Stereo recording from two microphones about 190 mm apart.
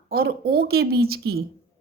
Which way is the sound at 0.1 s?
55° right (ahead or behind).